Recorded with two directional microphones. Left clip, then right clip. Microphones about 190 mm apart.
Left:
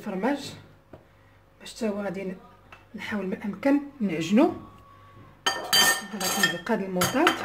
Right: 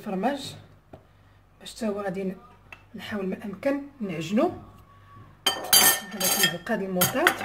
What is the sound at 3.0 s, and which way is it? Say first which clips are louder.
Speech: left 1 dB; 25° left (ahead or behind).